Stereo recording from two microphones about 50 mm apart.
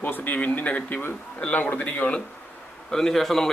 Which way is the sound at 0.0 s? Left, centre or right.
Left.